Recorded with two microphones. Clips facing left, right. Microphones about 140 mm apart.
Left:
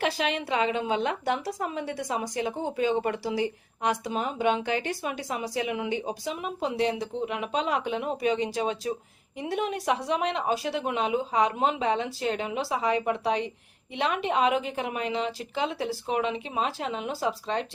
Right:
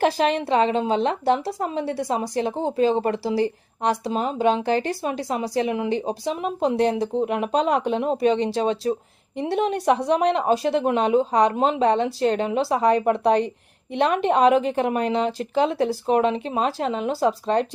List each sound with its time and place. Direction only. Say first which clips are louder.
0.0 s a woman's voice: right 7 dB; 40° right (ahead or behind)